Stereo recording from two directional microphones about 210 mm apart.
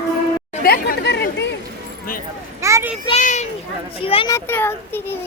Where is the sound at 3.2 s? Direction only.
35° left (ahead or behind).